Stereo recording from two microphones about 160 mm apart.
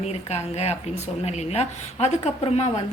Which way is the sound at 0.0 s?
40° left (ahead or behind).